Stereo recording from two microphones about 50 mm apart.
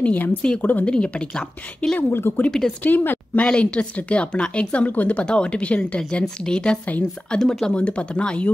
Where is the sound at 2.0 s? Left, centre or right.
Left.